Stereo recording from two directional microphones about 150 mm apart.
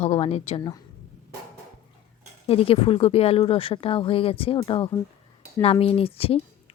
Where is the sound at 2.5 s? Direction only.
40° left (ahead or behind).